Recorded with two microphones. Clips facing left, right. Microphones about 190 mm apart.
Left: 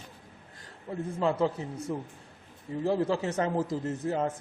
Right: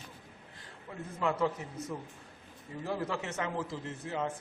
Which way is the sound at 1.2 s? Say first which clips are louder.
Left 4 dB; 30° left (ahead or behind).